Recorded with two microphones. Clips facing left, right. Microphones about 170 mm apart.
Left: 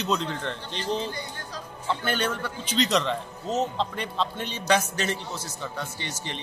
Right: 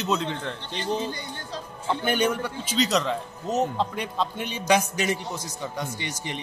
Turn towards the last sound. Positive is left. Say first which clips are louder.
# right 3 dB
turn(degrees=-15)  # may be behind; listen again after turning